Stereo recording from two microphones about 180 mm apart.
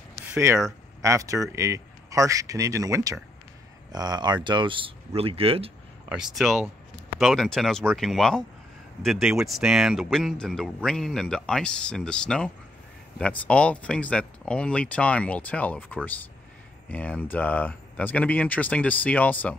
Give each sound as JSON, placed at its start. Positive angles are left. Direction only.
{"t": 1.0, "sound": "speech", "side_deg": -15}
{"t": 6.0, "sound": "speech", "side_deg": 0}